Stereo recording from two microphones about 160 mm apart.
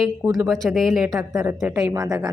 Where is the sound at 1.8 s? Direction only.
20° right (ahead or behind).